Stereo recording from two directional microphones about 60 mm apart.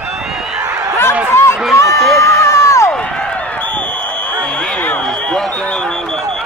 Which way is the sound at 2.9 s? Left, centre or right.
Centre.